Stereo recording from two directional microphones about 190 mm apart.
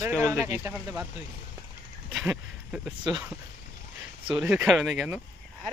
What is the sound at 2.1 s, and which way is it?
Speech, centre (ahead or behind).